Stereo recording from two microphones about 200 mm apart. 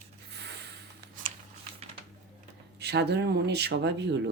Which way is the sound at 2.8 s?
55° right (ahead or behind).